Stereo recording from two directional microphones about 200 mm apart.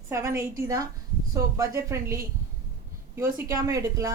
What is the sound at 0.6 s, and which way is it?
A woman's voice, 15° right (ahead or behind).